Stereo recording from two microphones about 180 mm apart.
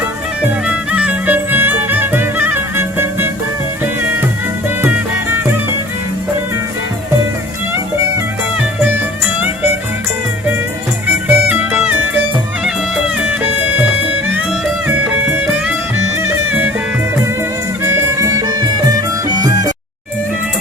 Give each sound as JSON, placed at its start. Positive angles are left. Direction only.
{"t": 0.4, "sound": "music", "side_deg": -5}
{"t": 11.3, "sound": "music", "side_deg": -10}
{"t": 14.8, "sound": "music", "side_deg": -10}
{"t": 17.8, "sound": "music", "side_deg": -15}